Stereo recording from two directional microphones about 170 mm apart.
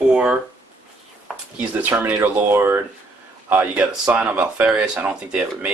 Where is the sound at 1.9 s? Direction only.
15° right (ahead or behind).